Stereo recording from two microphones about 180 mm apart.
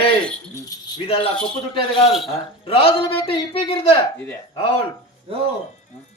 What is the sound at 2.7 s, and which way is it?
A man's voice, 30° left (ahead or behind).